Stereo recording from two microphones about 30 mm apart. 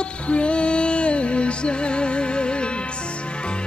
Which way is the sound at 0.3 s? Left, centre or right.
Left.